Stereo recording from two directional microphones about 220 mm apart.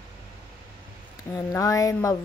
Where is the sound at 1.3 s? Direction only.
15° left (ahead or behind).